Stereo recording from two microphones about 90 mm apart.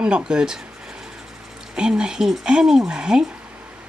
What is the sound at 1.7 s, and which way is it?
Speech, 10° right (ahead or behind).